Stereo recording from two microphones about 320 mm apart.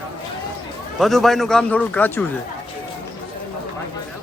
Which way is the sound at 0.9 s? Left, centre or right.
Centre.